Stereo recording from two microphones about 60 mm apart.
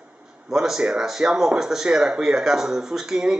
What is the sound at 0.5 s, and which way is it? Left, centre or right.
A man's voice, centre.